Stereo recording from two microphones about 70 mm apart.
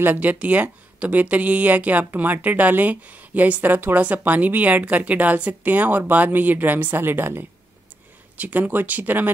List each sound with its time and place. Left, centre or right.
0.0 s a woman's voice: right